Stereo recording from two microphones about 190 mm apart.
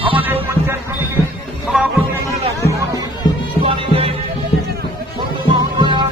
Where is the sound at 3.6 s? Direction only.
30° right (ahead or behind).